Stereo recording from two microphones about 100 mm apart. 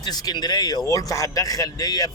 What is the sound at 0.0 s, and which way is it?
Speech, 40° left (ahead or behind).